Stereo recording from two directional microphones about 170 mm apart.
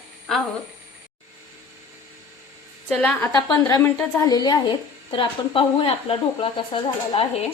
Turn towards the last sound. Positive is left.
turn(degrees=30)  # may be behind; listen again after turning